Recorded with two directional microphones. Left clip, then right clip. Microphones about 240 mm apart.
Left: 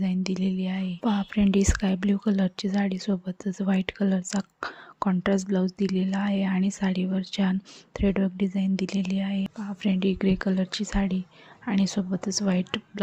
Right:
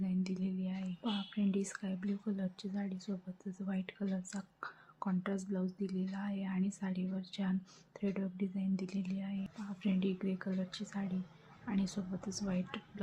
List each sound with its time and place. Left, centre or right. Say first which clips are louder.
0.0 s speech: left 11 dB; left